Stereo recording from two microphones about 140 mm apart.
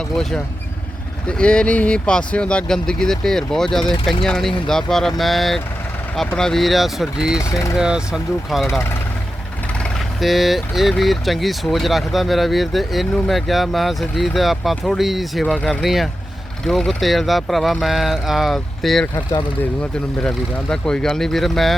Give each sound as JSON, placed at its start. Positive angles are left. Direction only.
{"t": 0.2, "sound": "speech", "side_deg": 5}
{"t": 7.3, "sound": "speech", "side_deg": 25}
{"t": 7.8, "sound": "speech", "side_deg": -5}
{"t": 10.2, "sound": "speech", "side_deg": 0}